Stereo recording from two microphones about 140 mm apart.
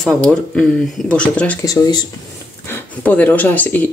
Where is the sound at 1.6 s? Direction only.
25° left (ahead or behind).